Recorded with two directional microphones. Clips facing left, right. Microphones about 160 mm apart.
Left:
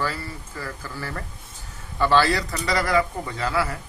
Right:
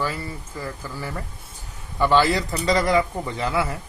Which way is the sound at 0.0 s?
15° right (ahead or behind).